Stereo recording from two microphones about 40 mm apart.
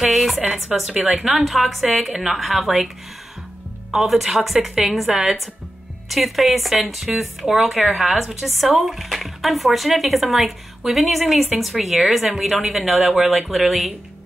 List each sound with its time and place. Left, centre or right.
0.0 s speech: centre
0.4 s speech: right
1.4 s speech: centre
3.9 s a woman's voice: centre